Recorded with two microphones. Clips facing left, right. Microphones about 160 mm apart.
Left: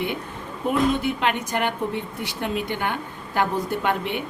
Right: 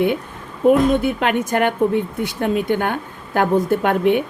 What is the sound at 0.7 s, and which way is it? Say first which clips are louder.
Speech: right 7 dB; 50° right (ahead or behind).